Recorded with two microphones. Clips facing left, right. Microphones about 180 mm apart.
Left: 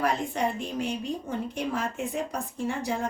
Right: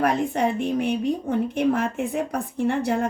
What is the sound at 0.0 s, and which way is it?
A woman's voice, 60° right (ahead or behind).